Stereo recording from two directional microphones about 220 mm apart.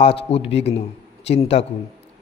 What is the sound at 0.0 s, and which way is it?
A man's voice, 25° left (ahead or behind).